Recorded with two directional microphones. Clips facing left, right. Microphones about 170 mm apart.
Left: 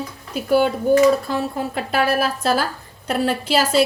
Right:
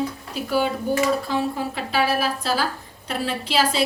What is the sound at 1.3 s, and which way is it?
A woman's voice, 50° left (ahead or behind).